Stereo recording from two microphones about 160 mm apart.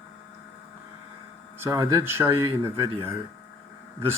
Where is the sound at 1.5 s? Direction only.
20° right (ahead or behind).